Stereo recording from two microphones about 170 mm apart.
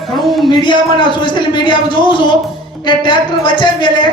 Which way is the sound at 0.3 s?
Centre (ahead or behind).